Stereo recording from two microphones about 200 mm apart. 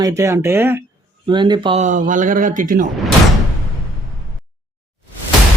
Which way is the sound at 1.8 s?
40° right (ahead or behind).